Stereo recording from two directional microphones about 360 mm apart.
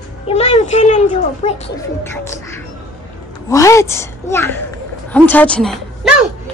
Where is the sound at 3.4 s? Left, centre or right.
Centre.